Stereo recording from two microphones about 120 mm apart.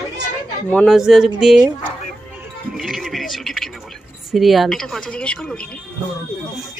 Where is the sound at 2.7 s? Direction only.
Centre (ahead or behind).